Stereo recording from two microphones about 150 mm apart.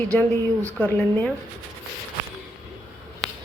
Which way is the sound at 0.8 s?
10° left (ahead or behind).